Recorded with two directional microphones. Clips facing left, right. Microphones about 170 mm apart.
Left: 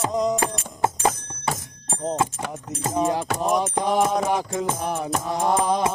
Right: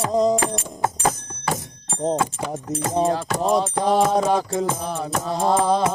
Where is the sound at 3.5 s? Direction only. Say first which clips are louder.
Right 3 dB; 15° left (ahead or behind).